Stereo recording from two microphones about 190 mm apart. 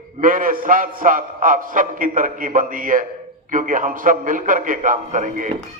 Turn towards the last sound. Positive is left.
turn(degrees=-45)  # may be behind; listen again after turning